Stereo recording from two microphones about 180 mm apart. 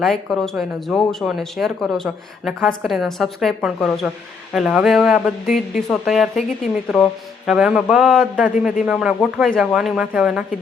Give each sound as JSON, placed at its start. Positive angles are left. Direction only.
{"t": 0.0, "sound": "speech", "side_deg": 0}